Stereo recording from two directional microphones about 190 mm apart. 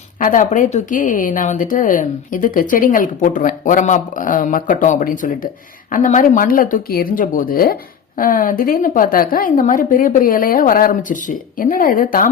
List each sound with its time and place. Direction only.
0.2 s a woman's voice: 45° left (ahead or behind)